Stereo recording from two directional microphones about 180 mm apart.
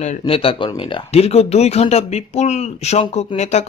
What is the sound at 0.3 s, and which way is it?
Speech, 30° left (ahead or behind).